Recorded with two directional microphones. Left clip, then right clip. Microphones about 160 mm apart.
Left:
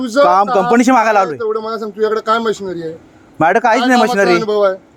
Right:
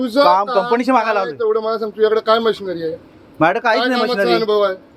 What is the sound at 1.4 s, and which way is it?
A man's voice, 30° left (ahead or behind).